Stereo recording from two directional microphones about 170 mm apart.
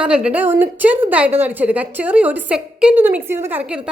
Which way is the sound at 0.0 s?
5° right (ahead or behind).